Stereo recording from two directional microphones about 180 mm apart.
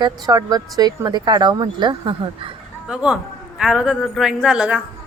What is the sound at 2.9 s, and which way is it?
Speech, 5° right (ahead or behind).